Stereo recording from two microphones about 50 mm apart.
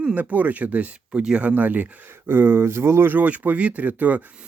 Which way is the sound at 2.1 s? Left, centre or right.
Right.